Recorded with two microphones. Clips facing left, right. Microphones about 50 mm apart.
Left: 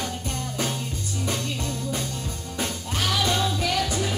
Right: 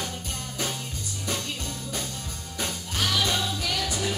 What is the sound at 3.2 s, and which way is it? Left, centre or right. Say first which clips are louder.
Music: left 4 dB; left.